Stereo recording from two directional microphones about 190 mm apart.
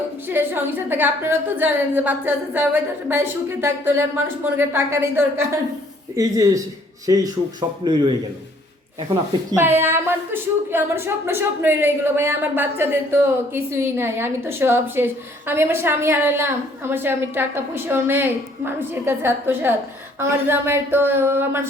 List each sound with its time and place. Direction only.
0.3 s a woman's voice: 10° right (ahead or behind)
9.5 s a woman's voice: 10° right (ahead or behind)